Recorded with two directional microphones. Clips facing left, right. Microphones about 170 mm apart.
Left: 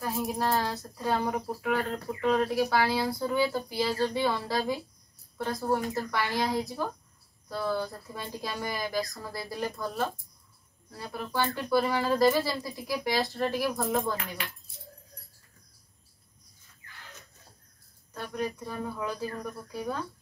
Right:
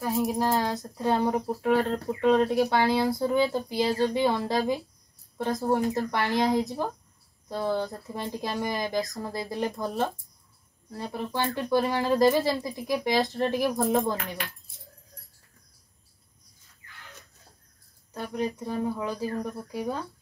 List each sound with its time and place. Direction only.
0.0 s speech: 15° right (ahead or behind)
1.6 s speech: 35° right (ahead or behind)
18.1 s speech: 15° right (ahead or behind)